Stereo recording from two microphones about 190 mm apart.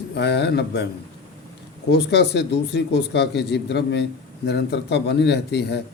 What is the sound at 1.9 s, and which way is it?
Speech, 60° left (ahead or behind).